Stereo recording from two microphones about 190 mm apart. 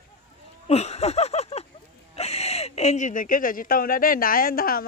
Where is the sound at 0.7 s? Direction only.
35° left (ahead or behind).